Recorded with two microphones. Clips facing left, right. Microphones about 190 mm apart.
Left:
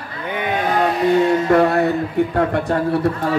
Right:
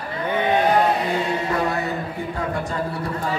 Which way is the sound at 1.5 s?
60° left (ahead or behind).